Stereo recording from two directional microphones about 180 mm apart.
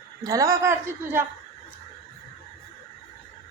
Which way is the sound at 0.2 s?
20° right (ahead or behind).